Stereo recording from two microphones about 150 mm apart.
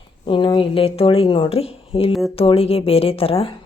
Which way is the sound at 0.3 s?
35° left (ahead or behind).